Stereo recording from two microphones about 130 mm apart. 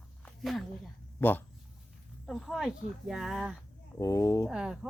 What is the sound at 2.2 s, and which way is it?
Speech, centre (ahead or behind).